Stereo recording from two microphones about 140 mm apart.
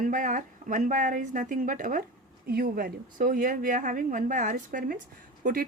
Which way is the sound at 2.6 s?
90° right.